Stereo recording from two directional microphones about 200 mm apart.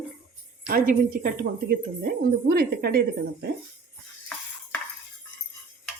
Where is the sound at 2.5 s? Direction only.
50° right (ahead or behind).